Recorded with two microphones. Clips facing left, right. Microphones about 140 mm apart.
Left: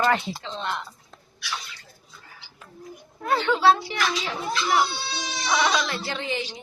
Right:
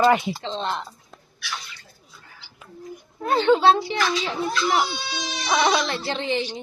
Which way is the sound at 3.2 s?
25° right (ahead or behind).